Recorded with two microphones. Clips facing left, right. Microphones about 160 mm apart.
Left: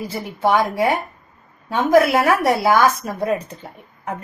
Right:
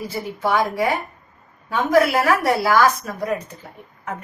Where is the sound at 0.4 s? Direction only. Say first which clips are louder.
Left 3 dB; 25° left (ahead or behind).